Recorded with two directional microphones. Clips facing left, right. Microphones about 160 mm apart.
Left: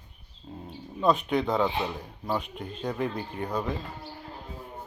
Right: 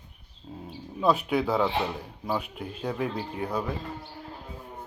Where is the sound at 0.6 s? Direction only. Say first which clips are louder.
Even; 5° right (ahead or behind).